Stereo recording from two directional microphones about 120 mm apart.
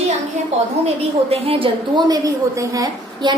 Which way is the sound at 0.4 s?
70° right (ahead or behind).